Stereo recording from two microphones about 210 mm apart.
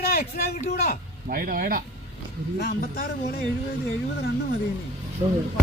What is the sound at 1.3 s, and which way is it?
Speech, 40° right (ahead or behind).